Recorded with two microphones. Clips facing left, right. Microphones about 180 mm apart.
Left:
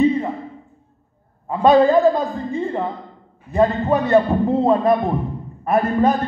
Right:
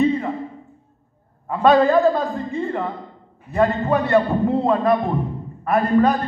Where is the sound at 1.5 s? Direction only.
20° left (ahead or behind).